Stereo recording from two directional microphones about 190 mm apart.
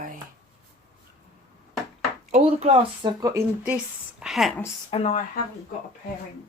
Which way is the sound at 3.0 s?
15° right (ahead or behind).